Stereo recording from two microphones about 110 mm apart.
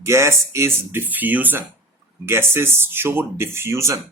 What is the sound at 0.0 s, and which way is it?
Speech, 25° right (ahead or behind).